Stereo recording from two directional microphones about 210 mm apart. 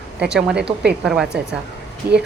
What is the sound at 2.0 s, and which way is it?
Speech, 10° right (ahead or behind).